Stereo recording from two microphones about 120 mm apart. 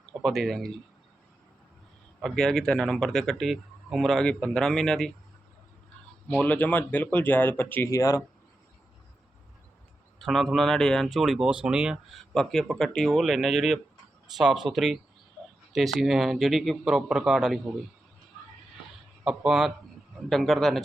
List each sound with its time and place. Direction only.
0.2 s speech: centre (ahead or behind)
2.2 s speech: 5° left (ahead or behind)
6.4 s speech: 15° left (ahead or behind)
7.9 s speech: 25° left (ahead or behind)
10.2 s speech: centre (ahead or behind)
12.3 s speech: 5° left (ahead or behind)
19.2 s speech: 5° right (ahead or behind)